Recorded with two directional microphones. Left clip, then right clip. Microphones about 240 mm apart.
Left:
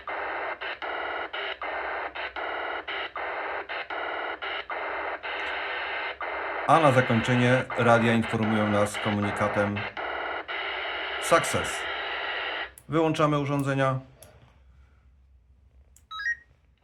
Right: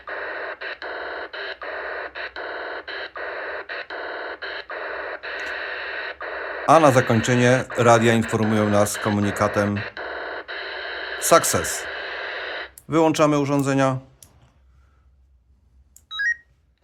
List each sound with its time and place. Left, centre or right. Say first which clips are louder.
0.0 s radio: right 2 dB; centre
6.7 s speech: right 6 dB; right
9.7 s radio: right 2 dB; centre
11.2 s speech: right 6 dB; right
11.9 s a sound: right 1 dB; centre
12.9 s speech: right 6 dB; right